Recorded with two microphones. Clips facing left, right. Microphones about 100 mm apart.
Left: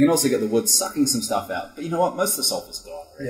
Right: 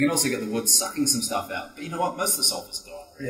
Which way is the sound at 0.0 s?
30° left (ahead or behind).